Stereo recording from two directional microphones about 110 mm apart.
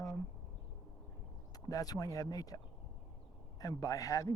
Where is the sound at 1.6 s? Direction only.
35° left (ahead or behind).